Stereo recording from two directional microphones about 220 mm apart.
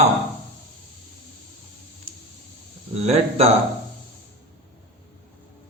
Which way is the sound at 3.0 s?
30° right (ahead or behind).